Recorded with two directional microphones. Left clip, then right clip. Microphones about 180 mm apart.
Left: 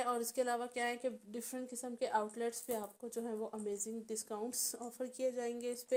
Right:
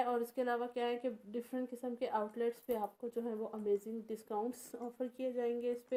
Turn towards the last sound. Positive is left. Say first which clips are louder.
# right 1 dB
turn(degrees=25)  # may be behind; listen again after turning